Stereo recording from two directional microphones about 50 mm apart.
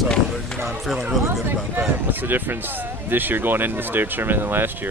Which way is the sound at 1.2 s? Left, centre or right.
Right.